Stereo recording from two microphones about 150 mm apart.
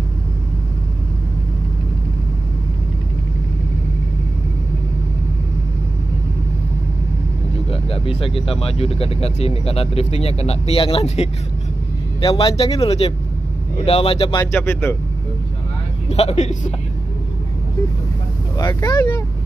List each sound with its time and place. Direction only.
7.7 s speech: 40° left (ahead or behind)
14.4 s speech: 15° left (ahead or behind)
16.1 s a man's voice: 45° left (ahead or behind)
18.7 s speech: 20° left (ahead or behind)